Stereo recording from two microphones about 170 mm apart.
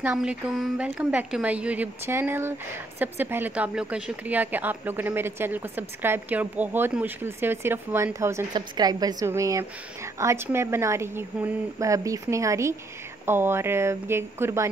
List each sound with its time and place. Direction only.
0.0 s a woman's voice: 5° right (ahead or behind)